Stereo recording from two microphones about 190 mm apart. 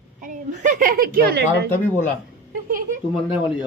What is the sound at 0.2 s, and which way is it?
A woman's voice, 40° right (ahead or behind).